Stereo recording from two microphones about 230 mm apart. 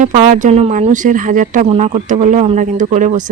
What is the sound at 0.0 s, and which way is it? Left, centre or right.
Speech, right.